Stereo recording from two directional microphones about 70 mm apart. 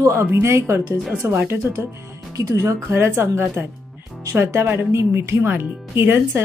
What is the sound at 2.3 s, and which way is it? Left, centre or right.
Speech, right.